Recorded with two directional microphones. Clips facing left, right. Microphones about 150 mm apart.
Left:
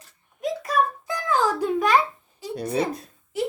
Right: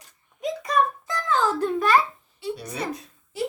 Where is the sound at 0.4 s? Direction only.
5° left (ahead or behind).